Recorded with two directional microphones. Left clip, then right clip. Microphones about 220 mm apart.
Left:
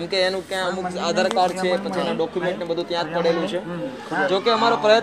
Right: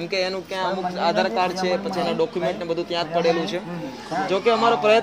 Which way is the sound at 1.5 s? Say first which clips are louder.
Left 1 dB; 35° right (ahead or behind).